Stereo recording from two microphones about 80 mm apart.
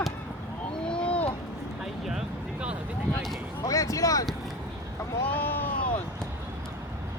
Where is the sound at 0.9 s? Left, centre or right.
Centre.